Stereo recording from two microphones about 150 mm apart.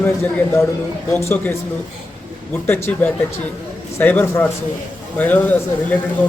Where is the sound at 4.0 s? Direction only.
10° left (ahead or behind).